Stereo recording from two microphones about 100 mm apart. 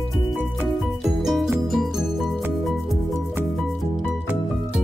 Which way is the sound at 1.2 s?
5° right (ahead or behind).